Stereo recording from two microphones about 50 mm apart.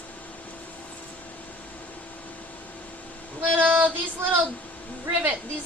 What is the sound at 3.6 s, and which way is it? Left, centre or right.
Speech, right.